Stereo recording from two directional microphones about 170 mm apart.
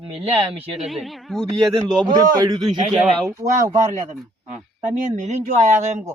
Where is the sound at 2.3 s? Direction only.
25° right (ahead or behind).